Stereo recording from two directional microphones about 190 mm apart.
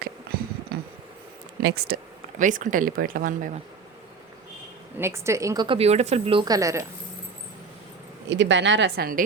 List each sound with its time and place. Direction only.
0.7 s a sound: 60° right (ahead or behind)
1.6 s speech: 55° right (ahead or behind)
2.4 s speech: 45° right (ahead or behind)
4.9 s a woman's voice: 15° right (ahead or behind)
8.3 s a woman's voice: 70° right (ahead or behind); by 9.2 s 50° right (ahead or behind)